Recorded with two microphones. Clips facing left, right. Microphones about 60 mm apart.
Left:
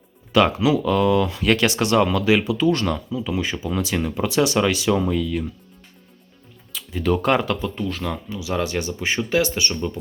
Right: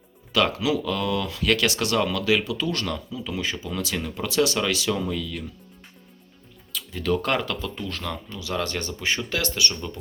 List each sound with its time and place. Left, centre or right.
0.3 s speech: left
6.7 s speech: centre